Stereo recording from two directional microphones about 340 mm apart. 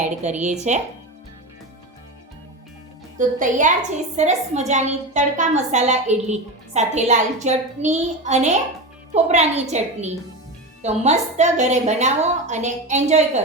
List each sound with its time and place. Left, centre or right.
0.0 s a woman's voice: right
3.2 s a woman's voice: right